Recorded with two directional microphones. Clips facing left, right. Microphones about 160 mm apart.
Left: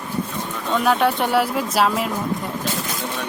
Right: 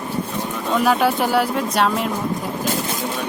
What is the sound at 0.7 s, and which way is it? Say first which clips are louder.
Speech: right 1 dB; centre (ahead or behind).